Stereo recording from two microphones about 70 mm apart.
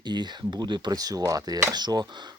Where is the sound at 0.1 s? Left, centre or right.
Right.